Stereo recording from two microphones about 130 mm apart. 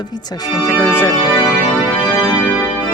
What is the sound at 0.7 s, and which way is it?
Speech, 15° left (ahead or behind).